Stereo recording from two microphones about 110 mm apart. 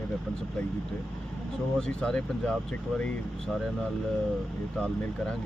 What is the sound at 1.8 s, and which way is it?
Speech, 5° left (ahead or behind).